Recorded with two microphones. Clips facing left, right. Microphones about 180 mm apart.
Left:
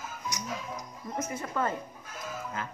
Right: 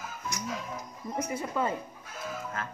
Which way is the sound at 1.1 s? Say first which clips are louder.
Right 2 dB; 10° right (ahead or behind).